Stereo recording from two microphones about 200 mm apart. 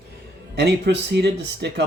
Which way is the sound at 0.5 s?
55° right (ahead or behind).